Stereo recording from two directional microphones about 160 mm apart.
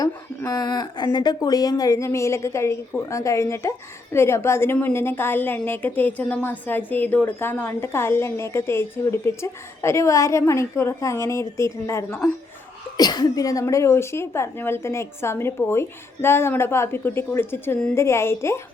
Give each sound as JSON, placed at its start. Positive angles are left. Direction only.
{"t": 0.0, "sound": "a woman's voice", "side_deg": 25}